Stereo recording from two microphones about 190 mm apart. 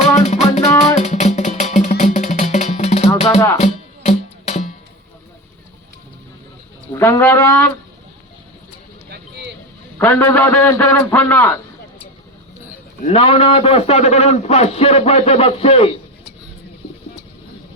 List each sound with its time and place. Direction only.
0.3 s music: 35° left (ahead or behind)
6.9 s a man's voice: 15° left (ahead or behind)
9.0 s a sound: 60° right (ahead or behind)
10.0 s a man's voice: 10° left (ahead or behind)
13.1 s a man's voice: 30° left (ahead or behind)